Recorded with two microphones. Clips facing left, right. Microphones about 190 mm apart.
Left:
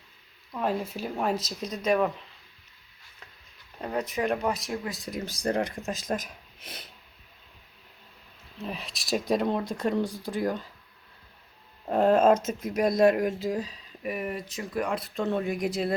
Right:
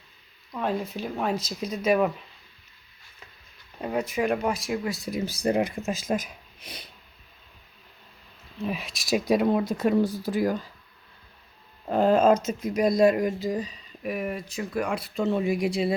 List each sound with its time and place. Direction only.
0.5 s speech: 5° left (ahead or behind)
3.8 s speech: 5° right (ahead or behind)
8.6 s speech: 5° right (ahead or behind)
11.9 s speech: centre (ahead or behind)